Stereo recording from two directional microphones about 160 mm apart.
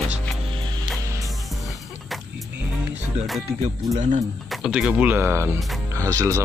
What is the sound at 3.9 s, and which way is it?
Speech, 50° right (ahead or behind).